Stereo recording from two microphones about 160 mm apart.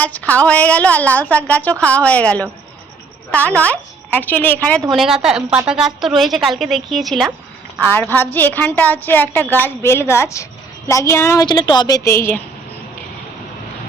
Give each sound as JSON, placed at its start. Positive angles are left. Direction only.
{"t": 0.0, "sound": "a woman's voice", "side_deg": 10}
{"t": 4.9, "sound": "a woman's voice", "side_deg": 0}
{"t": 7.8, "sound": "a woman's voice", "side_deg": 10}